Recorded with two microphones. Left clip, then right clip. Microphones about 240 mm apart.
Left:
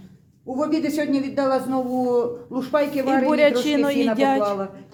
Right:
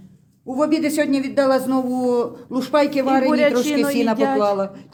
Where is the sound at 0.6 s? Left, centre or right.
Right.